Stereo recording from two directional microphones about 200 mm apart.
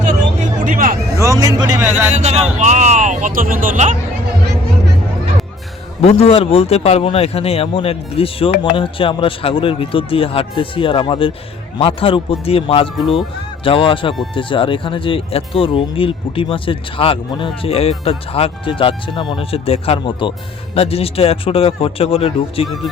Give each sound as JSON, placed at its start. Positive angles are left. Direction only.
{"t": 0.6, "sound": "a sound", "side_deg": -45}
{"t": 1.2, "sound": "speech", "side_deg": -15}
{"t": 1.9, "sound": "speech", "side_deg": -35}
{"t": 6.0, "sound": "speech", "side_deg": 30}
{"t": 22.6, "sound": "speech", "side_deg": 0}